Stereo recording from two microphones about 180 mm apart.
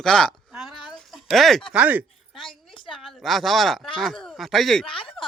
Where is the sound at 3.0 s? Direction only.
Centre (ahead or behind).